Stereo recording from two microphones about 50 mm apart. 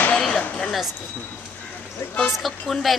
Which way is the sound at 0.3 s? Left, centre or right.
Centre.